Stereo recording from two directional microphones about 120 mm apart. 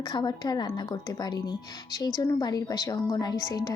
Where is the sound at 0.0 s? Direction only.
40° left (ahead or behind).